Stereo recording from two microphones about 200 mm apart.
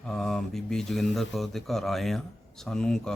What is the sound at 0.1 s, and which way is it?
A man's voice, centre (ahead or behind).